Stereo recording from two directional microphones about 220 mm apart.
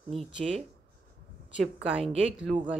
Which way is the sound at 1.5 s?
5° right (ahead or behind).